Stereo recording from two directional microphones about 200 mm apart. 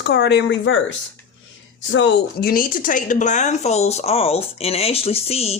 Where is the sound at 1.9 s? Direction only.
60° left (ahead or behind); by 5.6 s 30° left (ahead or behind).